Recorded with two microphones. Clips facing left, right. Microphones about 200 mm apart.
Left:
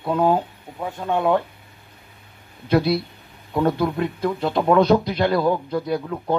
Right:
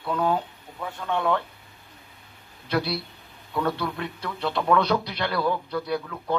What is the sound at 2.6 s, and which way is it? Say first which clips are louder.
A man's voice: left 8 dB; 50° left (ahead or behind).